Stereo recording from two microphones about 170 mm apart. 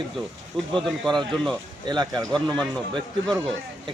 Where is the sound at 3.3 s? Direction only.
30° right (ahead or behind).